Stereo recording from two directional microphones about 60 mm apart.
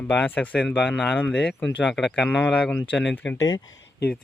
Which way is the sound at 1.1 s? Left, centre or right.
Left.